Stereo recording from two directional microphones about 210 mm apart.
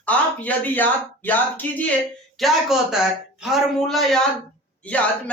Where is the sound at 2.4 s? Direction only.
Centre (ahead or behind).